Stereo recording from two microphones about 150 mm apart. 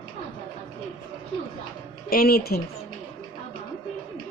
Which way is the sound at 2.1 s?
90° left.